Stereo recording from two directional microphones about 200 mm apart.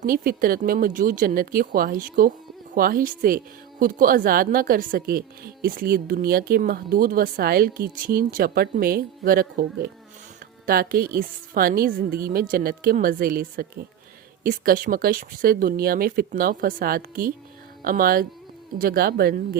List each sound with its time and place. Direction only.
0.0 s speech: 45° right (ahead or behind)